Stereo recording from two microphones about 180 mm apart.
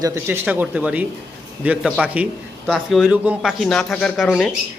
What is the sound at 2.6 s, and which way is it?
Speech, 5° left (ahead or behind).